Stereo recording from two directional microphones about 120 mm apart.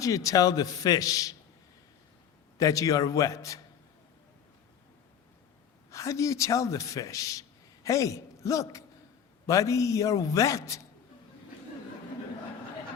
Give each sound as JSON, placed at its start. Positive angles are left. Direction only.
{"t": 0.0, "sound": "a man's voice", "side_deg": 30}
{"t": 2.6, "sound": "a man's voice", "side_deg": 30}
{"t": 5.9, "sound": "a man's voice", "side_deg": 25}